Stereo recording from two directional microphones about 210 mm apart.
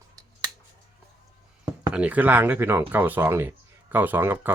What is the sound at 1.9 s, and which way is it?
Speech, 5° right (ahead or behind).